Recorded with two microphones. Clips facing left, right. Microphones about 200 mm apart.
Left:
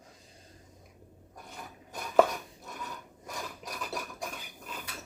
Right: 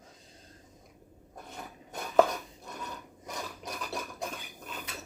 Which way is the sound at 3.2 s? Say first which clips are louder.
Right 1 dB; 20° right (ahead or behind).